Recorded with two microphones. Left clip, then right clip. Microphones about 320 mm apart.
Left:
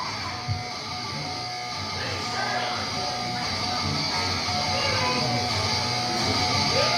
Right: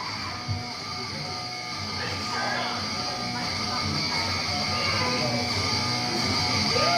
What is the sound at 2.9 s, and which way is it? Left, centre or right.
Music, left.